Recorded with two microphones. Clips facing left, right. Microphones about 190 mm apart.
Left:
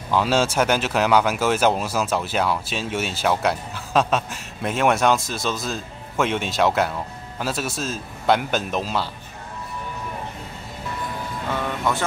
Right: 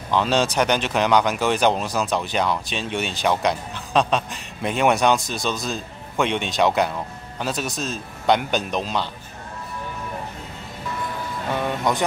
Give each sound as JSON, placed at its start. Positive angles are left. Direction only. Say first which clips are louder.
{"t": 0.1, "sound": "speech", "louder": "even", "side_deg": 5}
{"t": 11.5, "sound": "speech", "louder": "right 2 dB", "side_deg": -15}